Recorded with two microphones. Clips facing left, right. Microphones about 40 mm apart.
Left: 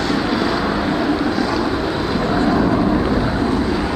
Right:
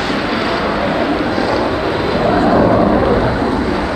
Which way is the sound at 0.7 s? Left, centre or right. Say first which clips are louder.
Right 3 dB; right.